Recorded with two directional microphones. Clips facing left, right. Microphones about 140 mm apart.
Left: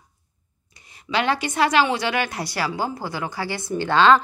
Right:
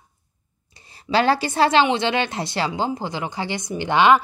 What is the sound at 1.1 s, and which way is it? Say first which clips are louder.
Speech: right 4 dB; 35° right (ahead or behind).